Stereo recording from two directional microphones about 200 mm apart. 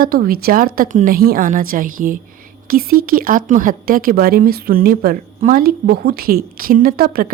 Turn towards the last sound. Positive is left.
turn(degrees=-45)  # may be behind; listen again after turning